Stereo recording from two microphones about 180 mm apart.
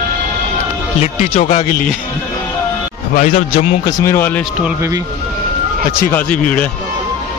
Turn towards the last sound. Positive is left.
turn(degrees=5)  # may be behind; listen again after turning